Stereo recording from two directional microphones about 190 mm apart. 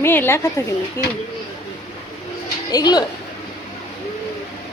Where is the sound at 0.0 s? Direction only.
10° left (ahead or behind).